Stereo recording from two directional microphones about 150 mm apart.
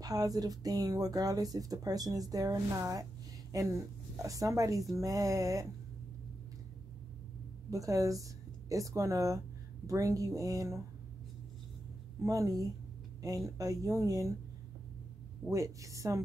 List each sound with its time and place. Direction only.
0.0 s speech: 25° right (ahead or behind)
7.7 s a woman's voice: 20° right (ahead or behind)
12.2 s speech: 20° right (ahead or behind)
15.5 s speech: 20° right (ahead or behind)